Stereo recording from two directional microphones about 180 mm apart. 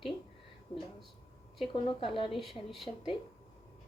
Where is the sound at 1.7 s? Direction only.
30° left (ahead or behind).